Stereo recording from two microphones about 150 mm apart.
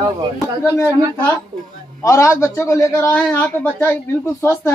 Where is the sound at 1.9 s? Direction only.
20° left (ahead or behind).